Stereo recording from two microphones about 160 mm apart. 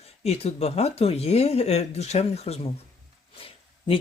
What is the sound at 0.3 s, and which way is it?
Speech, 40° left (ahead or behind).